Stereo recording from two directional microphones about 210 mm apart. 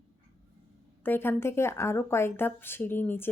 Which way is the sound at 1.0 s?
10° left (ahead or behind).